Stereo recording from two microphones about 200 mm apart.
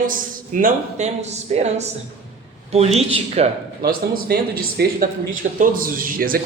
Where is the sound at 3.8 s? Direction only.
45° right (ahead or behind).